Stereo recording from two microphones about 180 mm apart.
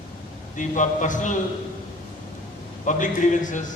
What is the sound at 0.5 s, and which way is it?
Speech, 45° left (ahead or behind).